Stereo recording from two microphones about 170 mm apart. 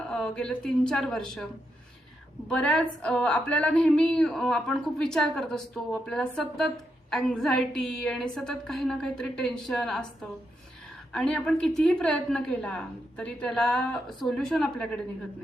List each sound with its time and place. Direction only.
0.0 s a woman's voice: 5° left (ahead or behind)
2.5 s a woman's voice: 5° left (ahead or behind)
11.1 s a woman's voice: 5° left (ahead or behind)